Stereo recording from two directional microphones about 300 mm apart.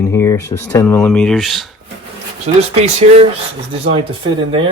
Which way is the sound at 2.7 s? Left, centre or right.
Right.